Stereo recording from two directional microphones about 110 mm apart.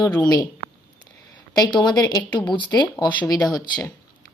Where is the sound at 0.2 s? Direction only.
35° left (ahead or behind).